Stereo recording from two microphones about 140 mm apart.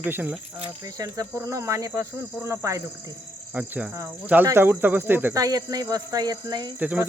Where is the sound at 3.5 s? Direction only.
10° right (ahead or behind); by 6.7 s 30° right (ahead or behind).